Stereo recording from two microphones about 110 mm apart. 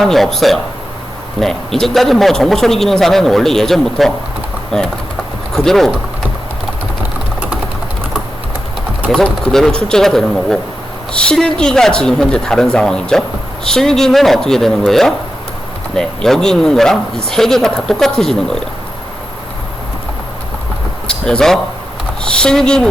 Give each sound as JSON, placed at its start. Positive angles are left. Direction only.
{"t": 0.0, "sound": "speech", "side_deg": 0}
{"t": 9.0, "sound": "speech", "side_deg": 5}
{"t": 21.2, "sound": "speech", "side_deg": 5}